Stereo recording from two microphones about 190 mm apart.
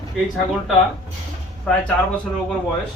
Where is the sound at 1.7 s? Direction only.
5° left (ahead or behind).